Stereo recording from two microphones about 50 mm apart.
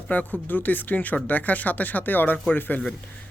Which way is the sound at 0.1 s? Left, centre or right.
Left.